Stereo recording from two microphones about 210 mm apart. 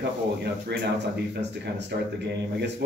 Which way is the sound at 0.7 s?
55° right (ahead or behind).